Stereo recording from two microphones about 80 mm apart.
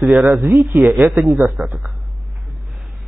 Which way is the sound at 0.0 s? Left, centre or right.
Centre.